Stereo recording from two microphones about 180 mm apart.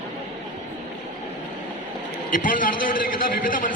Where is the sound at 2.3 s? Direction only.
50° left (ahead or behind).